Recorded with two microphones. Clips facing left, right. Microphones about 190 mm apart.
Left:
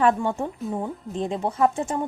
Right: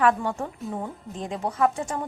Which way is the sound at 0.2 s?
20° left (ahead or behind).